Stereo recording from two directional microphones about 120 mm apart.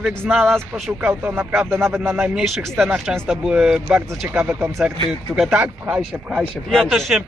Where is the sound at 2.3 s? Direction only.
Centre (ahead or behind).